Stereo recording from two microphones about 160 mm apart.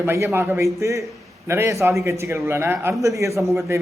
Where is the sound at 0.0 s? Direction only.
15° right (ahead or behind).